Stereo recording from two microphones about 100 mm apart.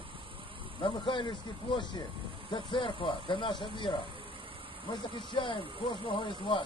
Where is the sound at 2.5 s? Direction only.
55° left (ahead or behind).